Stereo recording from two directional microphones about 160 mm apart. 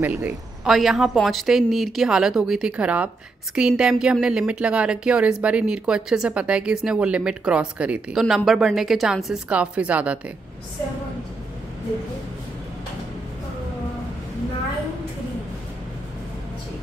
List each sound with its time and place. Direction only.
0.0 s speech: 10° right (ahead or behind)